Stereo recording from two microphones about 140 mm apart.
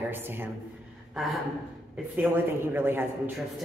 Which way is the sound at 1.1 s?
Centre (ahead or behind).